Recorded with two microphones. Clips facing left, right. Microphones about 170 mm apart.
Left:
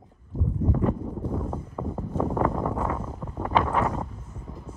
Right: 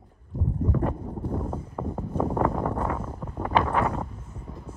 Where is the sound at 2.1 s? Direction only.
5° right (ahead or behind).